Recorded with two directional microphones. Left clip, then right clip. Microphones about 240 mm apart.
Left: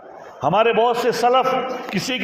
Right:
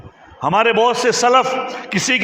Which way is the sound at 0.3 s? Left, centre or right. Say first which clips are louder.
Right 2 dB; right.